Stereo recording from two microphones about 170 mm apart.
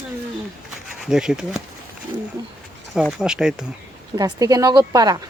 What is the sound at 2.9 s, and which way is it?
Speech, 5° right (ahead or behind).